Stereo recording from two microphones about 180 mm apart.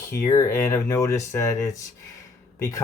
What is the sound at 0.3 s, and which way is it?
Speech, 15° left (ahead or behind).